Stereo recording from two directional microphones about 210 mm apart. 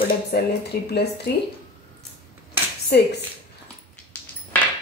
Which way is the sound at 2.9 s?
50° left (ahead or behind).